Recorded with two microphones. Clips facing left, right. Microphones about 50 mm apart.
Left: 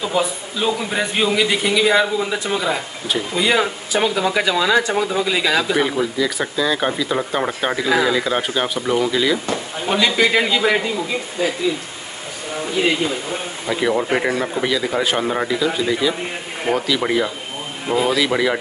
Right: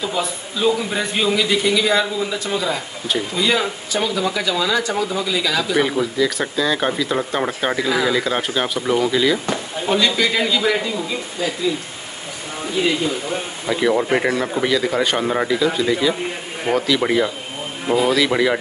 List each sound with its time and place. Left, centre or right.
0.0 s a man's voice: centre; by 5.8 s left
5.8 s speech: centre
9.8 s speech: centre
13.7 s speech: centre